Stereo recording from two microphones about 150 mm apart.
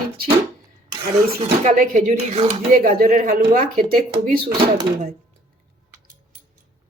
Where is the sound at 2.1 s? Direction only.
40° right (ahead or behind).